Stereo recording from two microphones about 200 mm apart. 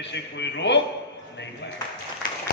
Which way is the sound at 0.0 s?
60° left (ahead or behind).